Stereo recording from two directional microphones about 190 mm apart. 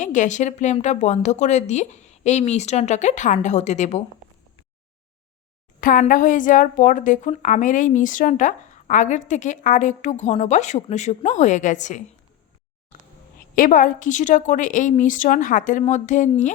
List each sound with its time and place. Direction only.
0.0 s a woman's voice: 40° left (ahead or behind)
5.8 s a woman's voice: 45° left (ahead or behind)
13.6 s a woman's voice: 45° left (ahead or behind)